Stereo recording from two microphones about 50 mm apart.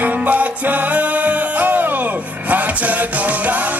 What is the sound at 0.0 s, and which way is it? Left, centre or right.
Music, right.